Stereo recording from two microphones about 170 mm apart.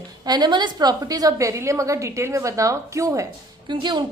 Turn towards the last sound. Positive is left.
turn(degrees=-25)  # may be behind; listen again after turning